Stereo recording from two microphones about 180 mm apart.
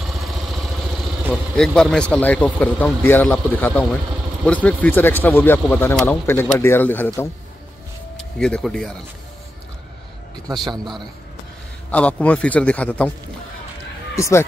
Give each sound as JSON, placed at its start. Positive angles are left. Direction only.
{"t": 0.0, "sound": "vehicle", "side_deg": 0}
{"t": 1.2, "sound": "speech", "side_deg": -5}
{"t": 10.6, "sound": "a man's voice", "side_deg": -25}
{"t": 11.9, "sound": "speech", "side_deg": 5}
{"t": 14.1, "sound": "speech", "side_deg": 15}